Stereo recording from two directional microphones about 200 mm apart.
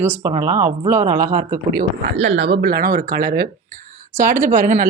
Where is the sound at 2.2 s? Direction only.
65° right (ahead or behind).